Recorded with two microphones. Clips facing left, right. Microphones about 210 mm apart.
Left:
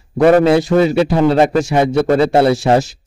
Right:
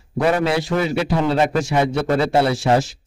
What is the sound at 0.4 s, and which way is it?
A man's voice, 35° left (ahead or behind).